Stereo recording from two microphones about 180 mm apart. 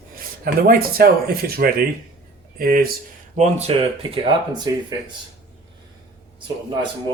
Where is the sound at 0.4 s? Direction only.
55° right (ahead or behind).